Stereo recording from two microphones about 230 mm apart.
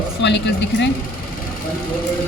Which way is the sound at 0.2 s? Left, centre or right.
Left.